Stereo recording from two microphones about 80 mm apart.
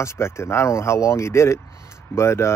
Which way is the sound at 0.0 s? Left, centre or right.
Left.